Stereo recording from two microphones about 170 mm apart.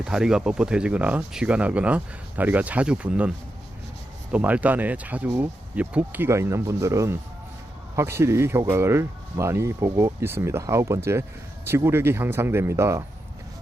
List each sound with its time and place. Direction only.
0.0 s speech: 5° right (ahead or behind)